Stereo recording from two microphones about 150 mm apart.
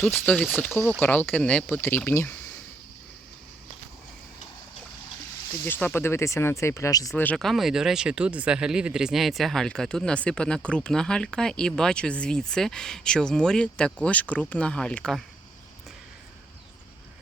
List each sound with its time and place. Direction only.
0.0 s speech: 10° left (ahead or behind)
5.6 s speech: 15° left (ahead or behind)
7.2 s speech: 5° left (ahead or behind)